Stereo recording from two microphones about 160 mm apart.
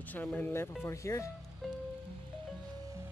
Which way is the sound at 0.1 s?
10° left (ahead or behind).